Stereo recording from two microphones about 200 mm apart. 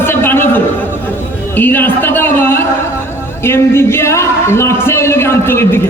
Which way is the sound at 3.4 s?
10° left (ahead or behind).